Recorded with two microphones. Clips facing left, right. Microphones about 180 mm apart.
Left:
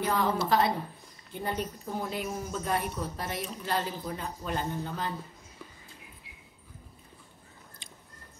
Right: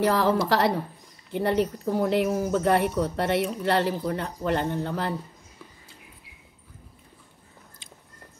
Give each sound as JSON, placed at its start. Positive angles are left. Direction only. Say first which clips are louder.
{"t": 0.0, "sound": "speech", "louder": "right 6 dB", "side_deg": -80}